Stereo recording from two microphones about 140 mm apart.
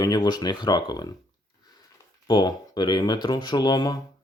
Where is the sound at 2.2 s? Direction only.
30° left (ahead or behind).